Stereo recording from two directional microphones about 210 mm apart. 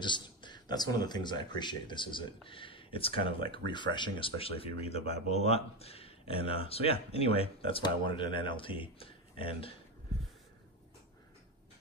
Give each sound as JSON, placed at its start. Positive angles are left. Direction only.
{"t": 0.0, "sound": "speech", "side_deg": 20}